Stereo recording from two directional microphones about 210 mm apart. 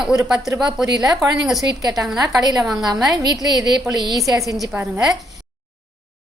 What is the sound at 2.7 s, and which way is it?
Speech, 20° right (ahead or behind).